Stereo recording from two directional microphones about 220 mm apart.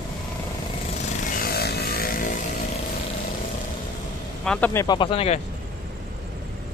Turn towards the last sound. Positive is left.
turn(degrees=25)  # may be behind; listen again after turning